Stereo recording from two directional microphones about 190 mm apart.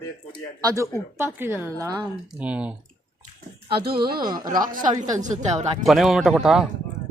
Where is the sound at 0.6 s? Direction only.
20° right (ahead or behind).